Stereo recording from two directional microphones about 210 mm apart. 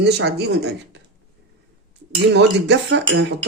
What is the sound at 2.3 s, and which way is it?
Speech, 55° right (ahead or behind).